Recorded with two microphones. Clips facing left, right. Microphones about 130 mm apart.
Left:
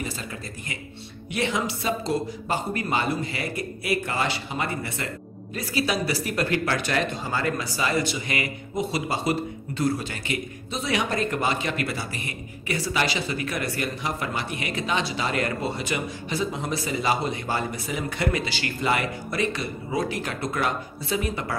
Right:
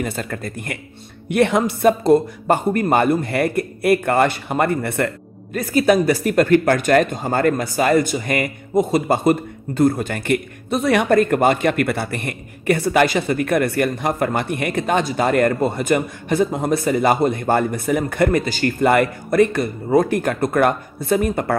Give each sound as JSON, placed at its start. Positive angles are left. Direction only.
{"t": 0.0, "sound": "a man's voice", "side_deg": -55}